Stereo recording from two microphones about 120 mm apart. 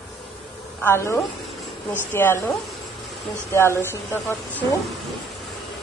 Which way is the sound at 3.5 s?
20° left (ahead or behind).